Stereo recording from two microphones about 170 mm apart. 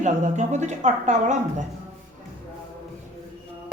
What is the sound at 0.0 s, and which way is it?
A woman's voice, 45° right (ahead or behind).